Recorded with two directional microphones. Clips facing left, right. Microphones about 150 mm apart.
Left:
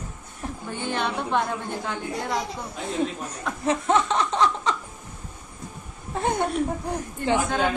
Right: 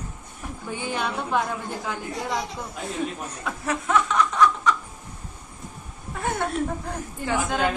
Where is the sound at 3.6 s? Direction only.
25° left (ahead or behind).